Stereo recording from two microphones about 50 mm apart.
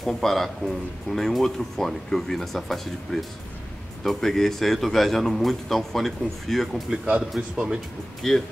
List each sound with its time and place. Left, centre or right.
0.0 s speech: centre
7.1 s a man's voice: right
8.2 s speech: centre